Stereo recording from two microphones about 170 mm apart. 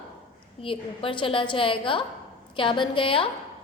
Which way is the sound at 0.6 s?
30° left (ahead or behind).